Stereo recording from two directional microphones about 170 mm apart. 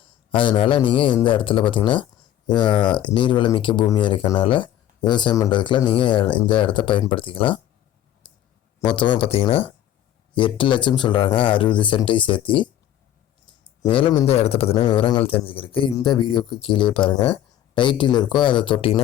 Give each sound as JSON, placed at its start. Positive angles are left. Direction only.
{"t": 0.0, "sound": "a man's voice", "side_deg": 30}
{"t": 8.2, "sound": "clicking", "side_deg": 30}
{"t": 8.8, "sound": "a man's voice", "side_deg": 30}
{"t": 13.8, "sound": "speech", "side_deg": 30}
{"t": 14.3, "sound": "a man's voice", "side_deg": 35}